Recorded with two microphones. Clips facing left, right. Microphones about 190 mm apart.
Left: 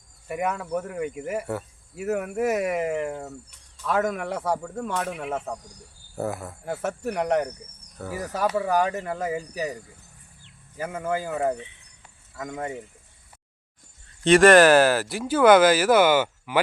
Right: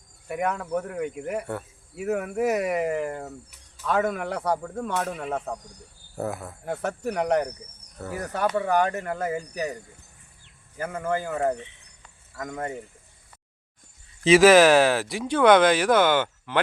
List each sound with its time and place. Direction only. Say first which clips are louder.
0.3 s speech: even; centre (ahead or behind)
8.9 s speech: even; 15° left (ahead or behind)
9.1 s speech: even; 5° left (ahead or behind)
10.8 s speech: even; 5° left (ahead or behind)
14.3 s speech: even; centre (ahead or behind)